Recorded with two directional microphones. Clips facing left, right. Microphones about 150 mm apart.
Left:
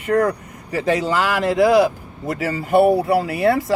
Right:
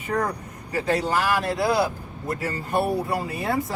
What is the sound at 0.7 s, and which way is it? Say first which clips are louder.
Speech: left 4 dB; 90° left.